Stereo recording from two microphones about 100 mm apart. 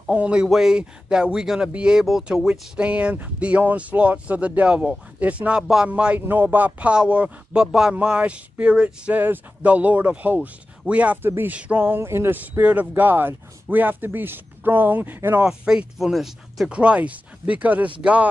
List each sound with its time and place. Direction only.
0.1 s speech: 10° right (ahead or behind)
15.4 s speech: 10° right (ahead or behind)